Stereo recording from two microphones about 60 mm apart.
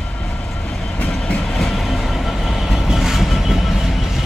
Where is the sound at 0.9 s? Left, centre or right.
Left.